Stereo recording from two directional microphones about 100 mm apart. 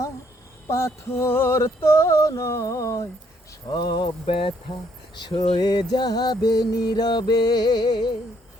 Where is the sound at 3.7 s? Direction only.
45° left (ahead or behind); by 4.5 s 65° left (ahead or behind).